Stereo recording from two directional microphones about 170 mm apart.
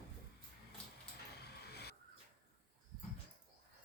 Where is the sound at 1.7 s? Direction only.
70° left (ahead or behind).